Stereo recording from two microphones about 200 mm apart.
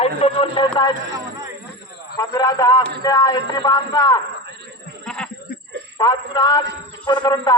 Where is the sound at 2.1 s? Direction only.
20° left (ahead or behind).